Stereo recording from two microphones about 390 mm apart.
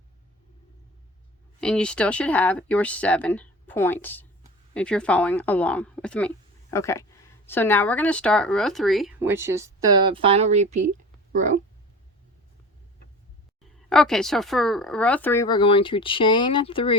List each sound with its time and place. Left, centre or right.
1.6 s speech: centre
13.9 s speech: centre